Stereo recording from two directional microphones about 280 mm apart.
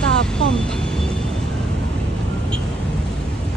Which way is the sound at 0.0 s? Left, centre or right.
Centre.